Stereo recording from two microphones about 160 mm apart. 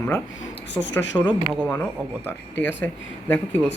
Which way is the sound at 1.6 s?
10° left (ahead or behind).